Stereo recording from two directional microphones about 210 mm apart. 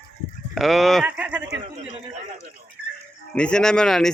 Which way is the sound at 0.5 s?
Centre (ahead or behind).